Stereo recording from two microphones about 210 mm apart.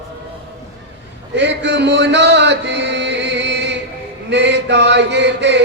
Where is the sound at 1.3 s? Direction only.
55° right (ahead or behind).